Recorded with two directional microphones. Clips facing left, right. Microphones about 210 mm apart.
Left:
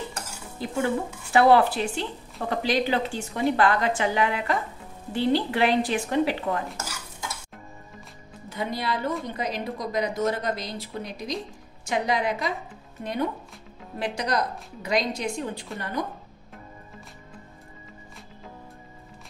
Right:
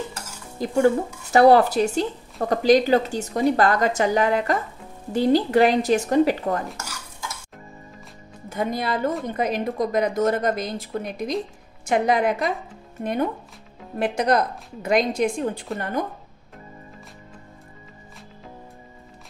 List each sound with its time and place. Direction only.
0.6 s speech: 40° right (ahead or behind)
8.5 s speech: 50° right (ahead or behind)